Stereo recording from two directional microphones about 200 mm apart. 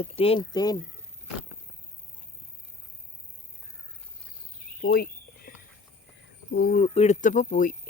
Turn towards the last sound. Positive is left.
turn(degrees=40)  # may be behind; listen again after turning